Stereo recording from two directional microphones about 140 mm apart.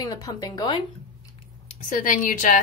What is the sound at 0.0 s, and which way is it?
Speech, 25° left (ahead or behind).